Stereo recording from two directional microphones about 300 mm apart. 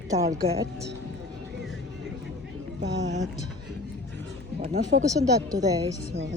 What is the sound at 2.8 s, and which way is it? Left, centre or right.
Music, right.